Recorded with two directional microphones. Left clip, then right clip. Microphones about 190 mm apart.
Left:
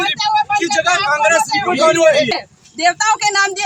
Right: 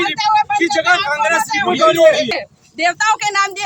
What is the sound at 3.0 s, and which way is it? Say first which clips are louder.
Speech: even; 25° right (ahead or behind).